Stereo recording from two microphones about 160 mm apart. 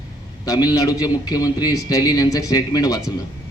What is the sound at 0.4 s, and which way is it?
A man's voice, 25° left (ahead or behind).